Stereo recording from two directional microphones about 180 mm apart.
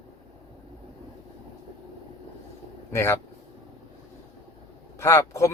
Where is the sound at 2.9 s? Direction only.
15° left (ahead or behind).